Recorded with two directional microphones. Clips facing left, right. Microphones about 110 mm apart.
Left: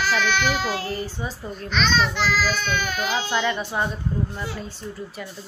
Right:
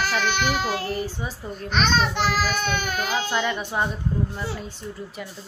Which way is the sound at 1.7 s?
50° right (ahead or behind).